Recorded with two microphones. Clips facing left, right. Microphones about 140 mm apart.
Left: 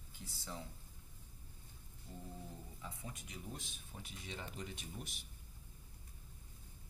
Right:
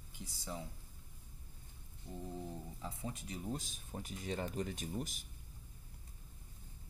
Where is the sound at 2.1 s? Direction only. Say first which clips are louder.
Right 5 dB; 25° right (ahead or behind).